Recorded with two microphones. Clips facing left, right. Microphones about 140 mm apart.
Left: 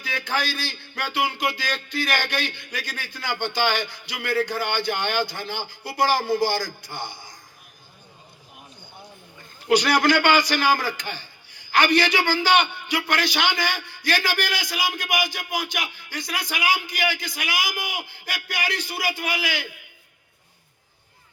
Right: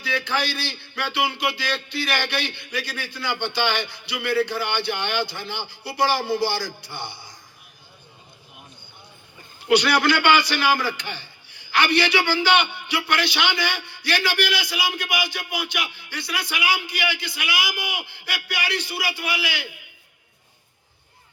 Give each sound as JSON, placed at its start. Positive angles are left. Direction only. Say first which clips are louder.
{"t": 0.0, "sound": "a man's voice", "louder": "right 2 dB", "side_deg": 45}
{"t": 9.6, "sound": "a man's voice", "louder": "even", "side_deg": 45}